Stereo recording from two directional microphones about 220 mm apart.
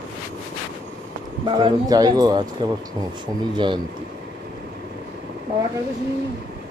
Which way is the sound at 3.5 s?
20° right (ahead or behind).